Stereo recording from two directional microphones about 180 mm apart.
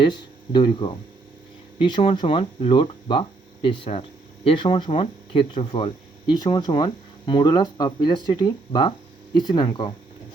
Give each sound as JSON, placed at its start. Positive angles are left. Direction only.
{"t": 0.0, "sound": "speech", "side_deg": 25}